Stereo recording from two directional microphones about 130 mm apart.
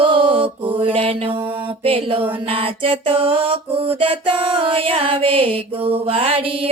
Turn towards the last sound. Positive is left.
turn(degrees=-45)  # may be behind; listen again after turning